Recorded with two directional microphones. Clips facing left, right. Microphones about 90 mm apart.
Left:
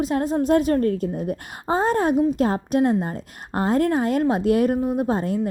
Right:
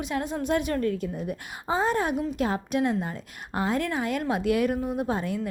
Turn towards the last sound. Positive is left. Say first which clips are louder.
# left 5 dB
turn(degrees=35)  # may be behind; listen again after turning